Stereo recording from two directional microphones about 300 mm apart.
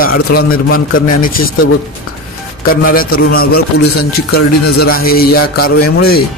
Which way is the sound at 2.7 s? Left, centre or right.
Left.